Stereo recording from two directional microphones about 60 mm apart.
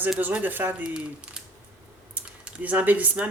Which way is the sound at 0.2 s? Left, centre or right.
Right.